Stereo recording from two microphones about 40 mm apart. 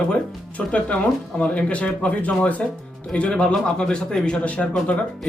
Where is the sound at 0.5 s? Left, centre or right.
Left.